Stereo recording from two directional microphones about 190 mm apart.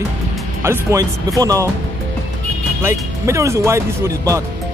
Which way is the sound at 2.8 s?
15° right (ahead or behind).